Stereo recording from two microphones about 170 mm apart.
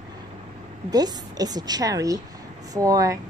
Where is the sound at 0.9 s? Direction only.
20° right (ahead or behind).